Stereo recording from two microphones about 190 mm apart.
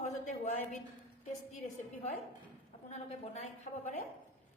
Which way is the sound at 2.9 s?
35° left (ahead or behind).